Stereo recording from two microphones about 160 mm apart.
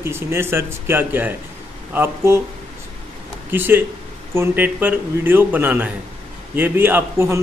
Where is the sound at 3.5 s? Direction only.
10° right (ahead or behind).